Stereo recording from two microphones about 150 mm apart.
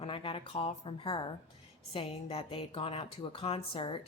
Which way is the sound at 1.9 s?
40° left (ahead or behind).